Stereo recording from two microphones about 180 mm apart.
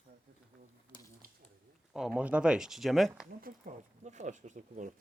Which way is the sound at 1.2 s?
55° right (ahead or behind).